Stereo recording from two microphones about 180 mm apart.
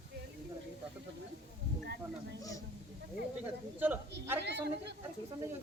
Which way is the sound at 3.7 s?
10° right (ahead or behind).